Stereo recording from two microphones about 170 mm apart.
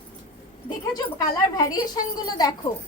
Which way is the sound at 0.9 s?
20° left (ahead or behind).